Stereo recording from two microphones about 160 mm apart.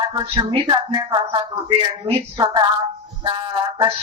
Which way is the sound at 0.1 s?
30° right (ahead or behind).